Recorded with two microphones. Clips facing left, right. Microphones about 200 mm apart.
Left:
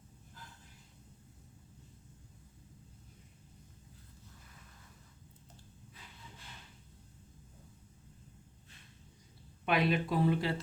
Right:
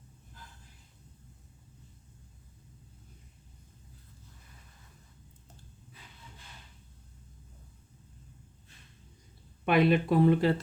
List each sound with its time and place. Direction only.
9.6 s speech: 55° right (ahead or behind)